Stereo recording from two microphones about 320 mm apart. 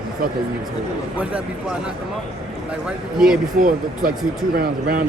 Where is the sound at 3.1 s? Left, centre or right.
Centre.